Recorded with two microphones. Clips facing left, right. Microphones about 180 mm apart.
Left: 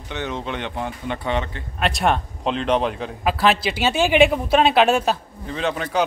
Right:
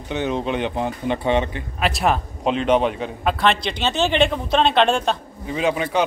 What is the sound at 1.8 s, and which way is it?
A man's voice, centre (ahead or behind).